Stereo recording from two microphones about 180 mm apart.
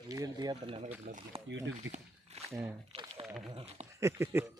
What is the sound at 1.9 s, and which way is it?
Speech, 90° right.